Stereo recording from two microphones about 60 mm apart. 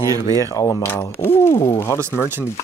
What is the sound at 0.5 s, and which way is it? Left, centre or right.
Speech, left.